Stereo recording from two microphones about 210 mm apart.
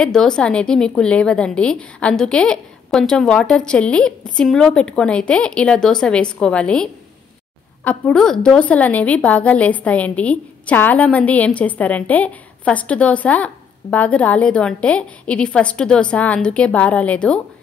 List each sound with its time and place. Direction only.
0.0 s a woman's voice: 5° left (ahead or behind)